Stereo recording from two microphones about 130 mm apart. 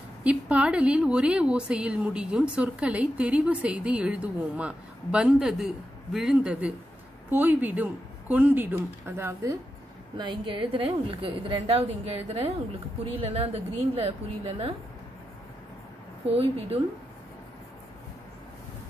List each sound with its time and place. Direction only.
0.2 s a woman's voice: 10° right (ahead or behind)
10.1 s a woman's voice: 35° right (ahead or behind)
16.3 s a woman's voice: 50° right (ahead or behind)